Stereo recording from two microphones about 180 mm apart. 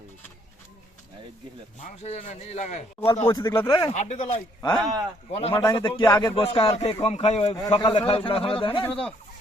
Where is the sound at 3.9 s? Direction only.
40° left (ahead or behind); by 6.3 s 20° left (ahead or behind).